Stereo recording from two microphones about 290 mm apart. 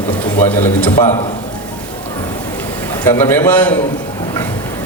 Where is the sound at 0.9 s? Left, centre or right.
Centre.